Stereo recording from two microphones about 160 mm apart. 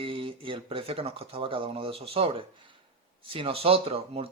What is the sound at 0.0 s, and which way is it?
Speech, 30° right (ahead or behind).